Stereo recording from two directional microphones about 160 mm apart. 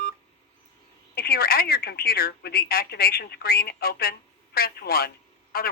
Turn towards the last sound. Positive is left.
turn(degrees=70)  # may be behind; listen again after turning